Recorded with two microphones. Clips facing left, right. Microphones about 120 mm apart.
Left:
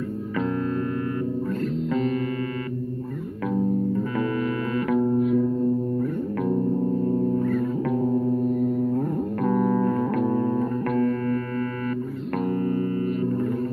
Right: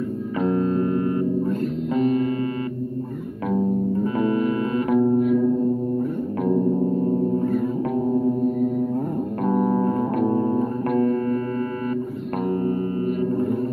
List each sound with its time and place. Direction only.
0.4 s music: 25° right (ahead or behind)
2.0 s music: 25° right (ahead or behind)
4.2 s music: 25° right (ahead or behind)
9.4 s music: 25° right (ahead or behind)